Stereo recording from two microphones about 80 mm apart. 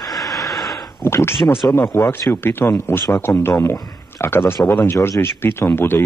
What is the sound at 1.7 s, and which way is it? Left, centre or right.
Speech, left.